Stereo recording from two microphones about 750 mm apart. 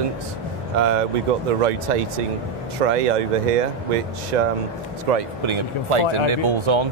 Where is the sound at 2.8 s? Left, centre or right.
Right.